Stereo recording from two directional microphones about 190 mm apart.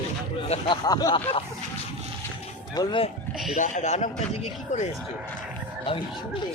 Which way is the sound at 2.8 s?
25° left (ahead or behind).